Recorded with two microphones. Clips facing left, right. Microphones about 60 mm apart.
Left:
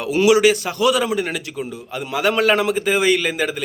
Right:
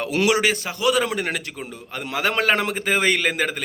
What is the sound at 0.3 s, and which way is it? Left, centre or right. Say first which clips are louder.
Speech: left 9 dB; right.